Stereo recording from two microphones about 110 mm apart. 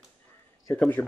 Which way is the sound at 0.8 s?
15° left (ahead or behind).